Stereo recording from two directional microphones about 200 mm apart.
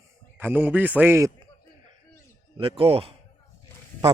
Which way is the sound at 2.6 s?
25° right (ahead or behind).